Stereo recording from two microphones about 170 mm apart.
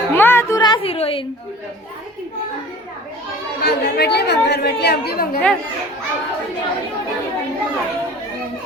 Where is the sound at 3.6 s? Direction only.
75° left (ahead or behind).